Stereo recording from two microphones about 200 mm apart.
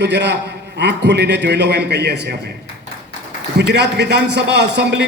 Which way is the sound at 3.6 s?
55° right (ahead or behind).